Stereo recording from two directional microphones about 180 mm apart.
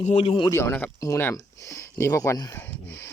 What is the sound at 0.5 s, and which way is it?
Speech, 10° left (ahead or behind).